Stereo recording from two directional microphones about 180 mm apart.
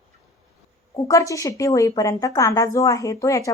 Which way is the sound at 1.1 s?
15° left (ahead or behind).